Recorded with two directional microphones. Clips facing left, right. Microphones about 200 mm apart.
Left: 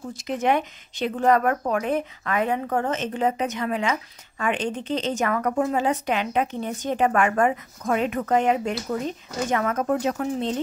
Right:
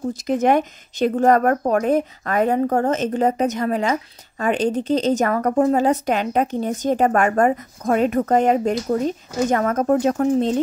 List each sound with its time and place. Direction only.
0.1 s speech: 40° right (ahead or behind)